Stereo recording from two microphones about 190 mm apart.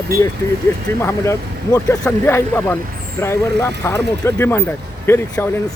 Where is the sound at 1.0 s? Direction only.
15° left (ahead or behind).